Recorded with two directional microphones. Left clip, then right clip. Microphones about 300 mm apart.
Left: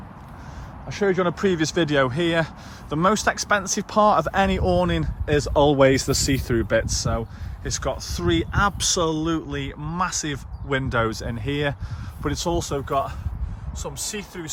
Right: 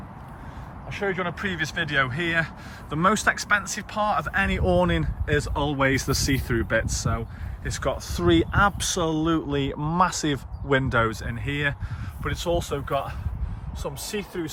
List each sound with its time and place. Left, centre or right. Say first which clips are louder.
0.9 s speech: left 6 dB; centre
13.8 s speech: even; centre